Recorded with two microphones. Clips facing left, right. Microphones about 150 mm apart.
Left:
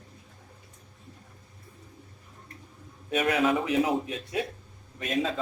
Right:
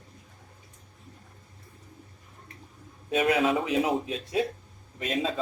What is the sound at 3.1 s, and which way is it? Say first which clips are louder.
A man's voice: right 1 dB; 25° right (ahead or behind).